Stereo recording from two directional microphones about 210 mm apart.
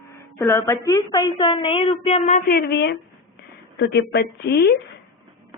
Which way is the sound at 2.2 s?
40° left (ahead or behind).